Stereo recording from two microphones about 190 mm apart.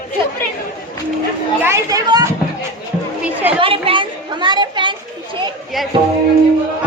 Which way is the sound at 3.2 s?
5° right (ahead or behind).